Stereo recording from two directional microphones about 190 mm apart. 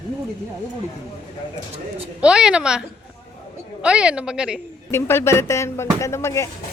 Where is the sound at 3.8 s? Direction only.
5° right (ahead or behind).